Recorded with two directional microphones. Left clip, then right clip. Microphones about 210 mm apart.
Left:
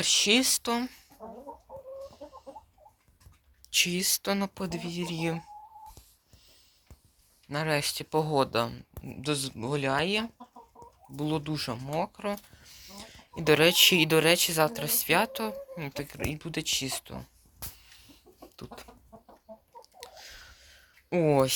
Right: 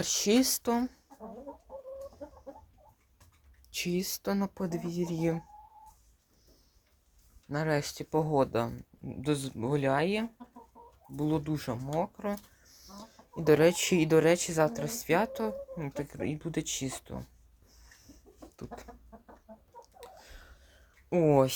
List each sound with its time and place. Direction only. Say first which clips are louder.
0.0 s speech: left 4 dB; 15° right (ahead or behind)
3.7 s speech: left 8 dB; 5° right (ahead or behind)
7.5 s speech: left 2 dB; 10° right (ahead or behind)
18.0 s chicken: left 1 dB; centre (ahead or behind)
20.0 s a sound: left 7 dB; centre (ahead or behind)